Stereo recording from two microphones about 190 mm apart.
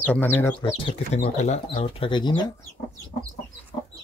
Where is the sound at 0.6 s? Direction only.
25° left (ahead or behind).